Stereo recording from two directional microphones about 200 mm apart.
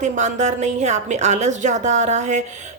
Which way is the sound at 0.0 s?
35° right (ahead or behind).